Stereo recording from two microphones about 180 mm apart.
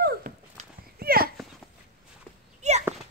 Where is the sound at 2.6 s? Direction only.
40° right (ahead or behind).